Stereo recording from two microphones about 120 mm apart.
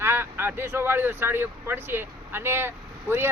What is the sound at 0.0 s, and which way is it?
Speech, 20° right (ahead or behind).